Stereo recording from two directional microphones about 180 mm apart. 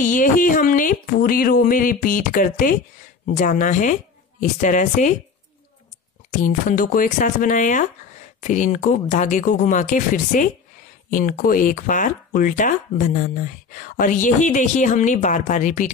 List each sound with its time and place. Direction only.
0.1 s speech: 50° left (ahead or behind)
6.4 s speech: 50° left (ahead or behind)